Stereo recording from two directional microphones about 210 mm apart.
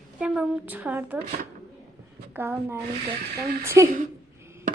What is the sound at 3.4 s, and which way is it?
Speech, 45° right (ahead or behind).